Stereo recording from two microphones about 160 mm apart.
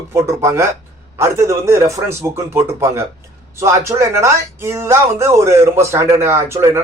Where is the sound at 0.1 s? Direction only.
15° right (ahead or behind).